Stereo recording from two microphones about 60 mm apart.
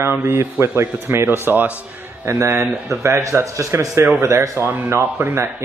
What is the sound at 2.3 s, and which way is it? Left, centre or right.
A man's voice, right.